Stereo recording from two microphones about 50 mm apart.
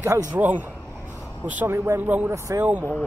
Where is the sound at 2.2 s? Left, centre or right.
Right.